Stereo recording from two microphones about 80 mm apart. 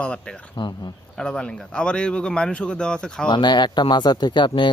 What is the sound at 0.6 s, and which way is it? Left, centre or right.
Speech, left.